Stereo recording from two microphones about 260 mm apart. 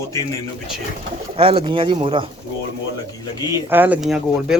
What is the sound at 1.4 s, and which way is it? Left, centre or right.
Speech, right.